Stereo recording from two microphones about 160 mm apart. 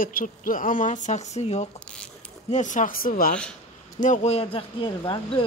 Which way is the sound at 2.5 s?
50° left (ahead or behind).